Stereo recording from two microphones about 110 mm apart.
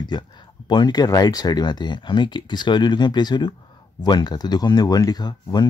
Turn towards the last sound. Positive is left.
turn(degrees=40)  # may be behind; listen again after turning